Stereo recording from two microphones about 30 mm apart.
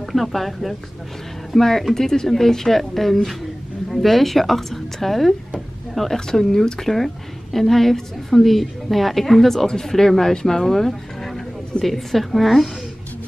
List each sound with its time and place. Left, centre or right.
0.0 s a woman's voice: centre
10.9 s a sound: centre
11.8 s a woman's voice: centre